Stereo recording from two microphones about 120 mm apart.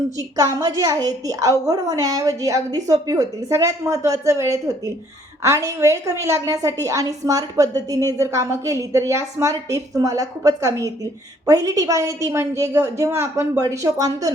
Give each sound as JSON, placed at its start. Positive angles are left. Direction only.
{"t": 0.2, "sound": "a woman's voice", "side_deg": -30}